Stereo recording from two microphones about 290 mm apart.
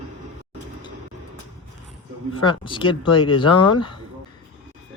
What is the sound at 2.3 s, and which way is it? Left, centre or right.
Speech, centre.